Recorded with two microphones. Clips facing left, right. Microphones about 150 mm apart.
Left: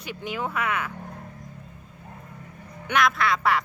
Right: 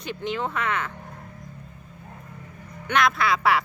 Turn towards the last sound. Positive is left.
turn(degrees=-5)  # may be behind; listen again after turning